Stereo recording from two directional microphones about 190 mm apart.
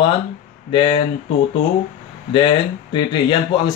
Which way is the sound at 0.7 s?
25° left (ahead or behind).